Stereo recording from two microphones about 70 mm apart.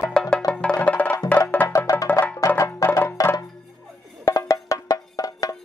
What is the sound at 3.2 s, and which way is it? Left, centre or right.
Music, left.